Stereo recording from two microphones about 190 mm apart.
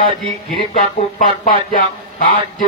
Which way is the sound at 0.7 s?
45° left (ahead or behind).